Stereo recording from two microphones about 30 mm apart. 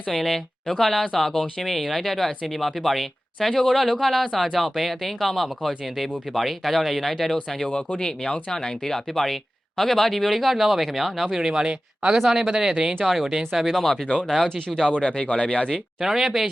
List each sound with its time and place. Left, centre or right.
0.1 s speech: centre
1.6 s speech: centre
7.9 s speech: left; by 11.3 s centre
11.3 s speech: centre
11.6 s speech: right
12.1 s speech: centre
13.1 s speech: centre
14.8 s speech: left
16.0 s speech: centre